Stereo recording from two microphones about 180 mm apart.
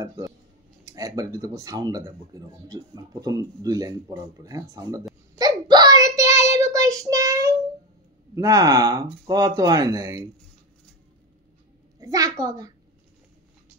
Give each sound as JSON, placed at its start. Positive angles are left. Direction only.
{"t": 0.8, "sound": "speech", "side_deg": -20}
{"t": 5.3, "sound": "child singing", "side_deg": -25}
{"t": 8.4, "sound": "speech", "side_deg": -20}
{"t": 12.0, "sound": "a woman's voice", "side_deg": -20}